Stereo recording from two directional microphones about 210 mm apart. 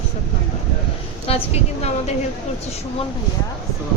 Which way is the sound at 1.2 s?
30° left (ahead or behind).